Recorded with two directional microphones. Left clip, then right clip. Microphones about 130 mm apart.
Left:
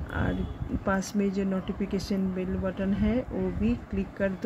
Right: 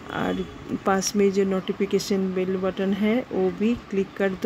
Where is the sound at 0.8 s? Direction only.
55° right (ahead or behind).